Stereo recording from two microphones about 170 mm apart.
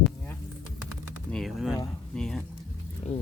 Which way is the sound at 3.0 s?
40° left (ahead or behind).